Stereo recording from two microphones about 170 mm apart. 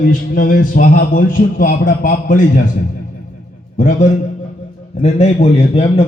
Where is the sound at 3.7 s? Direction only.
45° left (ahead or behind).